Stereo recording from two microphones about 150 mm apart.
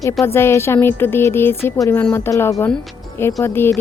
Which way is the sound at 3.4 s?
15° left (ahead or behind).